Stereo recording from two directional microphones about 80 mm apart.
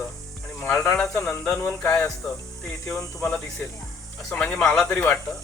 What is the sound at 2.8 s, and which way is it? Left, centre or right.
Speech, centre.